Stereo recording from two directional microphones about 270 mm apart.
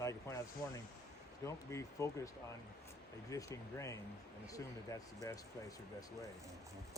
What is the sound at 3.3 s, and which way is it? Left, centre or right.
Speech, centre.